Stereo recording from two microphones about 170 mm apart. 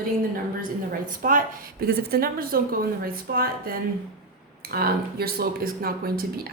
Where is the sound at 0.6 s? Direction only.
55° right (ahead or behind).